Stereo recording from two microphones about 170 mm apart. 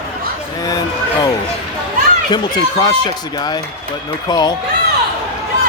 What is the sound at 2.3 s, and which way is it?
Speech, 25° left (ahead or behind).